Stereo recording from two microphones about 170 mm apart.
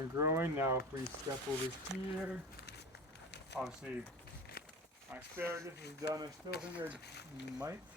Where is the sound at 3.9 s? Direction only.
10° right (ahead or behind).